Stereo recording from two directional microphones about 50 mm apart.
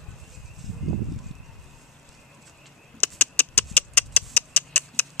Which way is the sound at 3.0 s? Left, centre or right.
Left.